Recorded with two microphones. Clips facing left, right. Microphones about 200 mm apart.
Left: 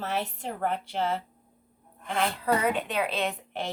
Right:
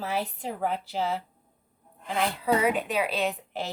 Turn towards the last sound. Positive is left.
turn(degrees=-5)  # may be behind; listen again after turning